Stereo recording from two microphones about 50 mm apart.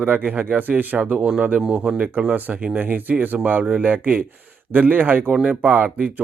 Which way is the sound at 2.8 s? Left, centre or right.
Right.